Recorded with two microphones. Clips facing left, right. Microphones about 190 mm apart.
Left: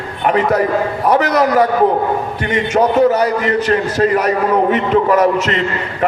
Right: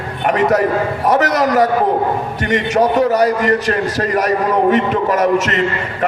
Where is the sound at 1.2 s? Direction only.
40° right (ahead or behind).